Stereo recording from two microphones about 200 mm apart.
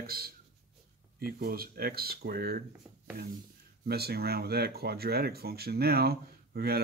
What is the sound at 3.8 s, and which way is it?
Speech, 50° right (ahead or behind).